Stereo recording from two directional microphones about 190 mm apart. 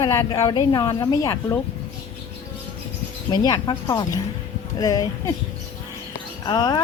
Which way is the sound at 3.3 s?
20° left (ahead or behind).